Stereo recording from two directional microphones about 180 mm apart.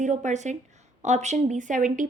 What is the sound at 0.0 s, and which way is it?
A woman's voice, 45° right (ahead or behind).